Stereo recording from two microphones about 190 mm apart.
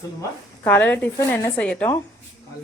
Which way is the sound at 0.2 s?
10° left (ahead or behind).